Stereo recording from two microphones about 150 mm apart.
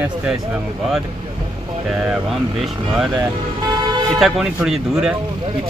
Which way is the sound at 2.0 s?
5° right (ahead or behind).